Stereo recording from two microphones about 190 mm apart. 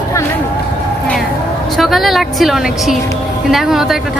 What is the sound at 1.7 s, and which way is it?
A woman's voice, centre (ahead or behind).